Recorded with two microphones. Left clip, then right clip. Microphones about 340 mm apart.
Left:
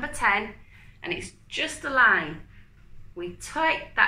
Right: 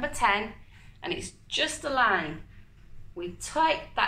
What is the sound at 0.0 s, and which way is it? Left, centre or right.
Speech, centre.